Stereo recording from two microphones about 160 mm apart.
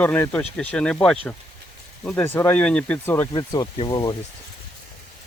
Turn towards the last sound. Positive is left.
turn(degrees=25)  # may be behind; listen again after turning